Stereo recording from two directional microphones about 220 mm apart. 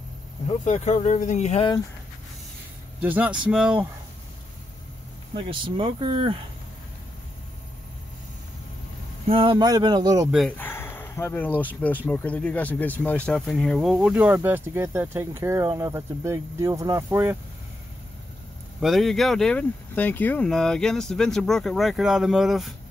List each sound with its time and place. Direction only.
0.5 s speech: 30° left (ahead or behind)
3.0 s speech: 5° right (ahead or behind)
5.3 s speech: 20° right (ahead or behind)
9.3 s speech: 25° right (ahead or behind)
10.3 s speech: 5° left (ahead or behind); by 17.4 s 10° right (ahead or behind)
18.8 s speech: centre (ahead or behind)